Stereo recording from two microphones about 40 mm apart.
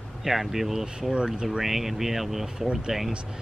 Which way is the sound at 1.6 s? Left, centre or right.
Centre.